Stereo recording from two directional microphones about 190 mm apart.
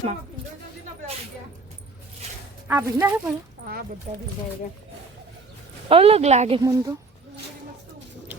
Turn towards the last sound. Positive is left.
turn(degrees=-20)  # may be behind; listen again after turning